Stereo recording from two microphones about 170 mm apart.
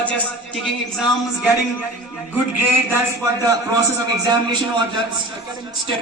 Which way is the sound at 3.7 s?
20° right (ahead or behind).